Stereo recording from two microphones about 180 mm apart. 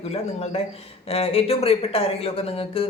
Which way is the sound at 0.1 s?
35° left (ahead or behind).